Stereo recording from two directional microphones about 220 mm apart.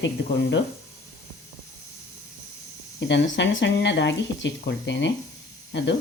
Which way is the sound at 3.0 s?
55° left (ahead or behind).